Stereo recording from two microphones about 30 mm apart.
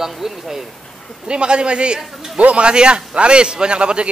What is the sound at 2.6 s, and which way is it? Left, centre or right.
A man's voice, right.